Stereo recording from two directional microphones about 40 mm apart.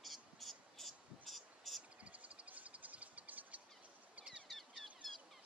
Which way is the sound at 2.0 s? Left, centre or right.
Right.